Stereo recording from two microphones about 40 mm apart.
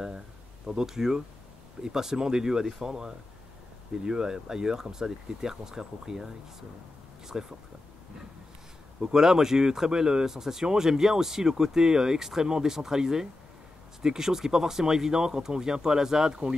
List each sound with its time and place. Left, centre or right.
0.7 s speech: centre
7.3 s speech: centre
9.0 s speech: centre